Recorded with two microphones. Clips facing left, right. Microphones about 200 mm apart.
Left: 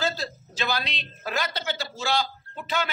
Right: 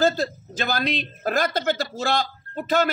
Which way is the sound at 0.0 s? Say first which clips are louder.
Right 8 dB; 50° right (ahead or behind).